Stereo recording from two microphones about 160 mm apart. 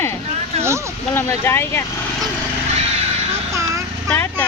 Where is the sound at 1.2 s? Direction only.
15° left (ahead or behind).